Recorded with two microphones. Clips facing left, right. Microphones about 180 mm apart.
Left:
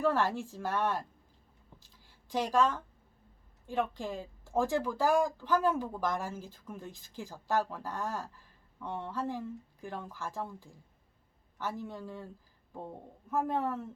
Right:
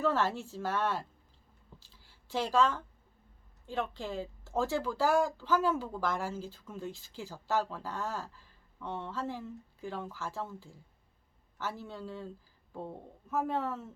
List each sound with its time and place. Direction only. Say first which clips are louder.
0.0 s speech: left 1 dB; 15° left (ahead or behind)
1.8 s a sound: left 1 dB; 15° left (ahead or behind)
3.7 s speech: left 2 dB; 15° left (ahead or behind)
13.3 s speech: left 1 dB; 15° left (ahead or behind)